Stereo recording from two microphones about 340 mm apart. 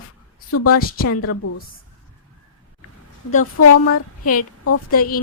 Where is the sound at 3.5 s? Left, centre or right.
Left.